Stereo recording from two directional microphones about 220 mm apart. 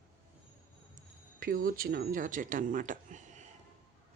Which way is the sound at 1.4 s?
40° right (ahead or behind).